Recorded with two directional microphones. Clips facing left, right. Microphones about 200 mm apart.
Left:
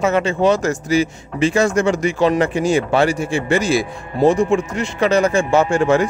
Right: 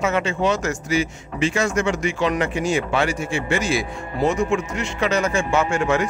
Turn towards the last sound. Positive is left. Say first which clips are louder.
# left 5 dB
turn(degrees=35)  # may be behind; listen again after turning